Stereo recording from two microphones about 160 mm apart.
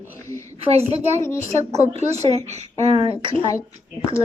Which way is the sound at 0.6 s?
40° right (ahead or behind).